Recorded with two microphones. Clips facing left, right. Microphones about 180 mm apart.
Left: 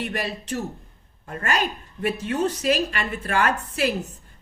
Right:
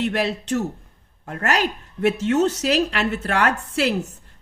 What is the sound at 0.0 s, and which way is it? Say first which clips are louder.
Speech: right 6 dB; 75° right (ahead or behind).